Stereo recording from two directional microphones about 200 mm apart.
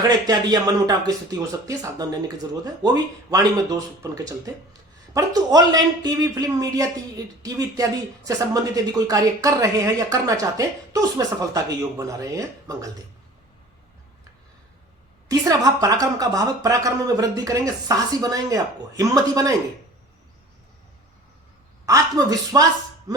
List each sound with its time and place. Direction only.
0.3 s speech: 20° right (ahead or behind)
15.3 s speech: 20° right (ahead or behind)
21.8 s speech: 15° right (ahead or behind)